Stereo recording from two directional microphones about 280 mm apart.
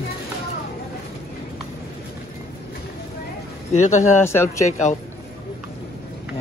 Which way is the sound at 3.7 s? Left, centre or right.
Left.